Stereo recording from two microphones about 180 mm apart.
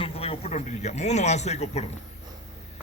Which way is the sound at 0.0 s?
35° left (ahead or behind).